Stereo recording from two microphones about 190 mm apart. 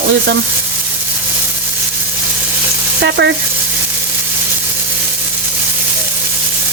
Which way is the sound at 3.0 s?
65° right (ahead or behind).